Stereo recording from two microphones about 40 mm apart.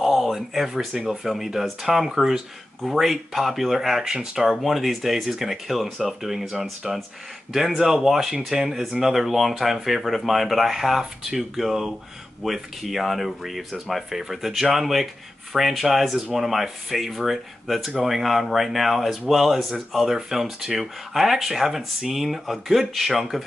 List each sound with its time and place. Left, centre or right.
0.0 s a sound: centre
1.0 s speech: centre
4.6 s speech: centre
7.8 s speech: centre